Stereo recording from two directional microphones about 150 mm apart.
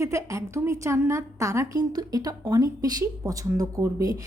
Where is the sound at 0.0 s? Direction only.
20° right (ahead or behind).